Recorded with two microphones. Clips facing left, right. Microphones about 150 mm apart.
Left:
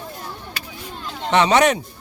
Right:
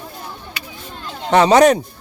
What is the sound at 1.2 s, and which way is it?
Speech, 35° right (ahead or behind).